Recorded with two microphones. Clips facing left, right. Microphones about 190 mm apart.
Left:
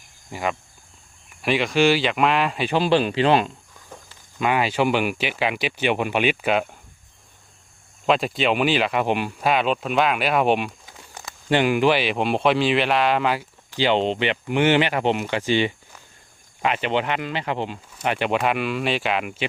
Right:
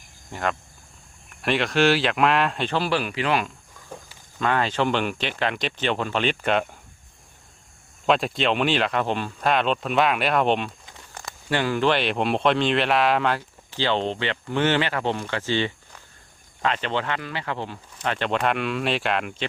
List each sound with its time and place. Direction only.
0.3 s speech: 5° left (ahead or behind)
2.7 s speech: 20° left (ahead or behind)
4.4 s speech: 10° left (ahead or behind)
8.0 s speech: centre (ahead or behind)
11.4 s speech: 20° left (ahead or behind)